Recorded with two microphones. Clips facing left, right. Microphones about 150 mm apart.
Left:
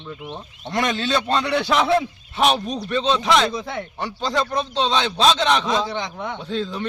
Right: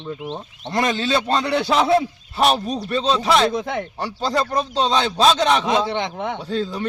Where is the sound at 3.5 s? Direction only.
50° right (ahead or behind).